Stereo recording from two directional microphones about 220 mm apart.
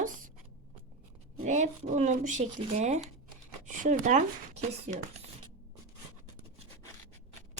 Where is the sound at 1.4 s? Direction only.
35° right (ahead or behind).